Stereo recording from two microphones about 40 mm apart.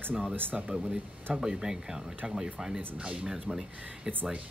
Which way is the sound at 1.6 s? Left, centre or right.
Centre.